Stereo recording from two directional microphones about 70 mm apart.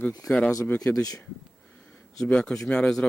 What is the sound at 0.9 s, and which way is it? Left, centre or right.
Speech, left.